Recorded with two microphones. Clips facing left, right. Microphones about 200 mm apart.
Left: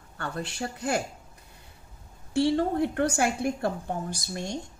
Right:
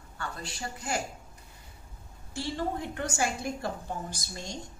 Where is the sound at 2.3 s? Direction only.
65° left (ahead or behind).